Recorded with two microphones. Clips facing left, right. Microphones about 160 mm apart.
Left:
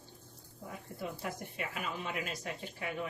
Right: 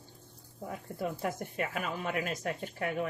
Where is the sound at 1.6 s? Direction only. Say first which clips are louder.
Right 5 dB; 50° right (ahead or behind).